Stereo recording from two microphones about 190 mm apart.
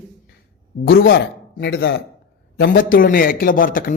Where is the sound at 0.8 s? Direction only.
50° left (ahead or behind).